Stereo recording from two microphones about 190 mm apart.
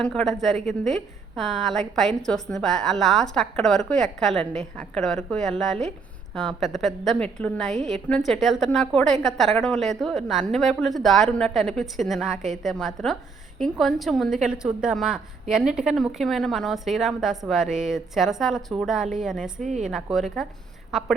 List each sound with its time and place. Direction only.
0.0 s a woman's voice: centre (ahead or behind)
0.5 s a woman's voice: 40° right (ahead or behind)
1.4 s a woman's voice: centre (ahead or behind)